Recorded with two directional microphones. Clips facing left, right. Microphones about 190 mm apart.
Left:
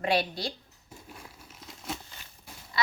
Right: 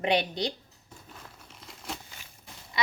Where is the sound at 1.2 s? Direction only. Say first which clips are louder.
Left 1 dB; 5° left (ahead or behind).